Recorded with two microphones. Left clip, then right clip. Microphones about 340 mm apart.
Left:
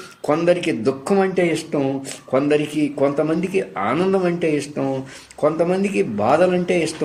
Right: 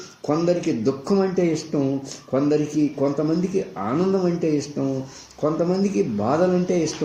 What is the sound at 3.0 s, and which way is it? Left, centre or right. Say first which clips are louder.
A man's voice: left 3 dB; left.